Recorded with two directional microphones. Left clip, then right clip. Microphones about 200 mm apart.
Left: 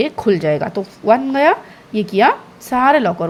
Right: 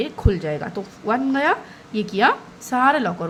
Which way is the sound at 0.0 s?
30° left (ahead or behind).